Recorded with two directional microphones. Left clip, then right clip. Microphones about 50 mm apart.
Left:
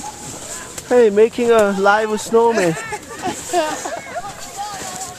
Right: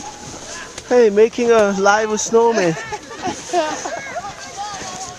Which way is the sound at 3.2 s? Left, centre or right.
Centre.